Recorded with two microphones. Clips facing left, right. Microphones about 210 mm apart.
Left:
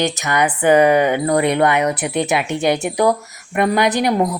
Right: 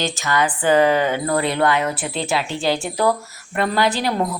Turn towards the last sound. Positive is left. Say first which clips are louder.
# left 4 dB
turn(degrees=20)  # may be behind; listen again after turning